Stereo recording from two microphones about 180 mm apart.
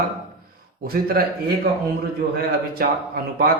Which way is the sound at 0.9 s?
55° right (ahead or behind).